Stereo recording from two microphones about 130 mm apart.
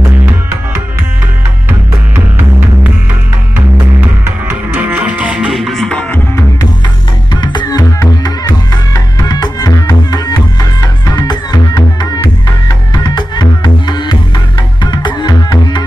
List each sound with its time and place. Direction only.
1.7 s music: 15° right (ahead or behind)
4.5 s music: 15° right (ahead or behind); by 6.0 s 5° left (ahead or behind)
6.1 s music: 20° left (ahead or behind)
7.3 s music: 35° left (ahead or behind)